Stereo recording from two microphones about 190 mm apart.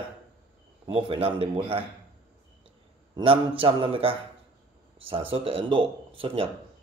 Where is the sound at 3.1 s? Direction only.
30° right (ahead or behind).